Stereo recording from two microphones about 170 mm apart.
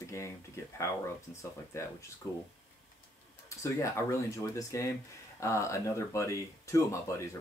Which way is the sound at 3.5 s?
15° left (ahead or behind).